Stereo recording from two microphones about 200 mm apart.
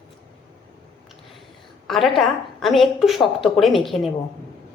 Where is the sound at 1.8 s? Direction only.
Centre (ahead or behind).